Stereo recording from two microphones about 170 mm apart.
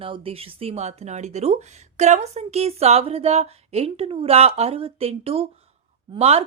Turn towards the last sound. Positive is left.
turn(degrees=-35)  # may be behind; listen again after turning